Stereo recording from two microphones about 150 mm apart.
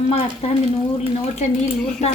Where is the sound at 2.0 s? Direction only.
50° left (ahead or behind).